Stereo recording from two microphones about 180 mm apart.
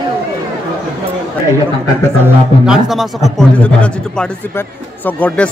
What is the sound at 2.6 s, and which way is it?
Speech, centre (ahead or behind).